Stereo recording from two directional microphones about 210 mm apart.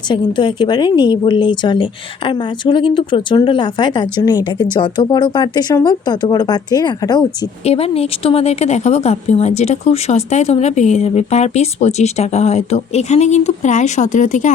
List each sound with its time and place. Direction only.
0.1 s speech: 20° left (ahead or behind)